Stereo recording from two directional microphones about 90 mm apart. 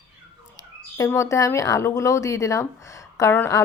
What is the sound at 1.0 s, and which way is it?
A woman's voice, 35° left (ahead or behind).